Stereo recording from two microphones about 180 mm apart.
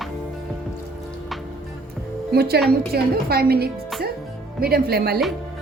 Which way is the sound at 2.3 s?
60° right (ahead or behind).